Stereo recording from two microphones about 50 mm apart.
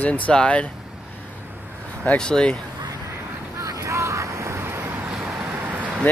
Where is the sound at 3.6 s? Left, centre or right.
Right.